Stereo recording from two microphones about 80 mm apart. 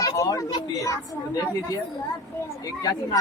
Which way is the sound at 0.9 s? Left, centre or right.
Left.